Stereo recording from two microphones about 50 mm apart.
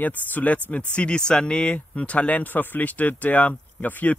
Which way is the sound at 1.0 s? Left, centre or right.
Centre.